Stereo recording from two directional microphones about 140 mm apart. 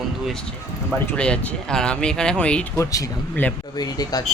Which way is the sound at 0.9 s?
10° left (ahead or behind).